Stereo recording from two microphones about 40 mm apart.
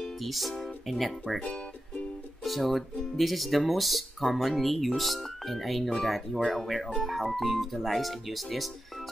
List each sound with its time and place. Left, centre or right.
0.0 s music: centre
0.8 s speech: centre
1.4 s music: left
2.4 s speech: centre